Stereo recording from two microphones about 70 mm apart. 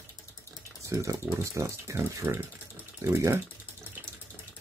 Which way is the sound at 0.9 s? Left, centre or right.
Right.